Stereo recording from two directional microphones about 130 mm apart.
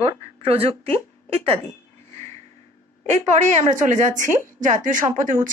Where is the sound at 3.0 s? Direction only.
65° right (ahead or behind).